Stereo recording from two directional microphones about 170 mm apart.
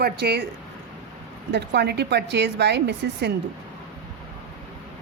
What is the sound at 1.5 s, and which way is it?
A woman's voice, 80° right.